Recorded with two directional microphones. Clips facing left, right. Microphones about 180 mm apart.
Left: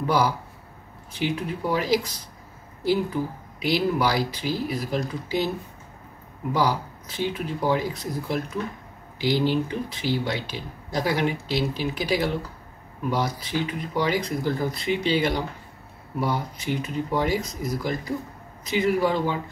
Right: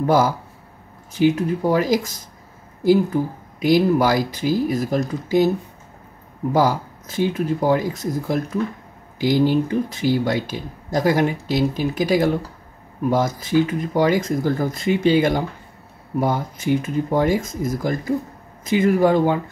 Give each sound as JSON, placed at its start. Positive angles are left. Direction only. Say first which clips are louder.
{"t": 0.0, "sound": "speech", "louder": "right 5 dB", "side_deg": -45}
{"t": 6.5, "sound": "speech", "louder": "right 5 dB", "side_deg": -45}